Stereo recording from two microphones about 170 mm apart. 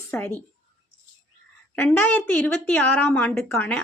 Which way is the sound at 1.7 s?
10° left (ahead or behind).